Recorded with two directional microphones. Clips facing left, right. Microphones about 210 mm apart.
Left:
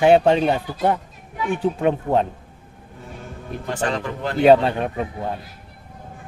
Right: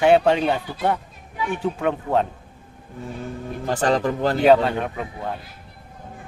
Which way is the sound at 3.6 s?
40° right (ahead or behind).